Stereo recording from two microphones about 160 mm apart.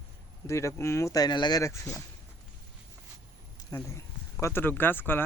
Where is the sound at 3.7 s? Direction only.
20° left (ahead or behind).